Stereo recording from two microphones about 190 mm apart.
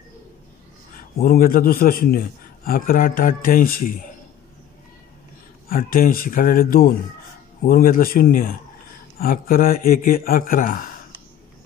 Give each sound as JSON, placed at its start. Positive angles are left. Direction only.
{"t": 1.2, "sound": "a man's voice", "side_deg": 50}
{"t": 5.7, "sound": "a man's voice", "side_deg": 50}